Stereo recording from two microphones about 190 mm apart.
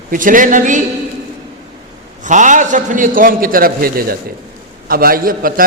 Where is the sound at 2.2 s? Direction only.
40° right (ahead or behind).